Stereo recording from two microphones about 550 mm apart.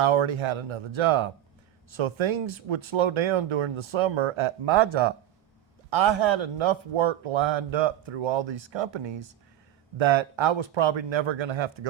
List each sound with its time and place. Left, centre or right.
0.0 s speech: right